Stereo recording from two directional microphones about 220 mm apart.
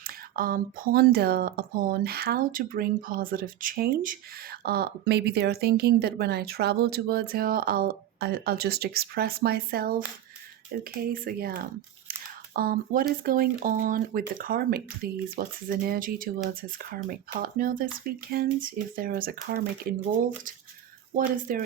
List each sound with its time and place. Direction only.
0.0 s speech: 40° right (ahead or behind)
21.5 s speech: 40° right (ahead or behind)